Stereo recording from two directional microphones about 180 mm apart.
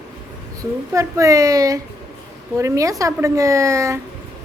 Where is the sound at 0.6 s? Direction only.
20° right (ahead or behind).